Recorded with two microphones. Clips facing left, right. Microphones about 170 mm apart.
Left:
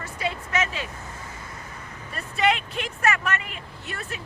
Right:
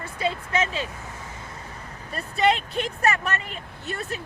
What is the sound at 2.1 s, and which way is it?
Speech, 35° right (ahead or behind).